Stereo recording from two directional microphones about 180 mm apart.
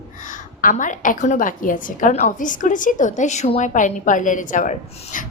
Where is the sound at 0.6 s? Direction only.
45° left (ahead or behind).